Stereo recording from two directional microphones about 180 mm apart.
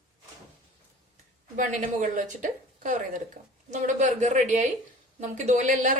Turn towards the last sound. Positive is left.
turn(degrees=-45)  # may be behind; listen again after turning